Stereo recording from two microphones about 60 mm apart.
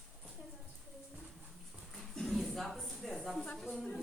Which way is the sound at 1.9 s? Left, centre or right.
Centre.